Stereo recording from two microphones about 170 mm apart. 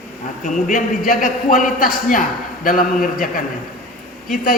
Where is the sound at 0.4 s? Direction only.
50° left (ahead or behind).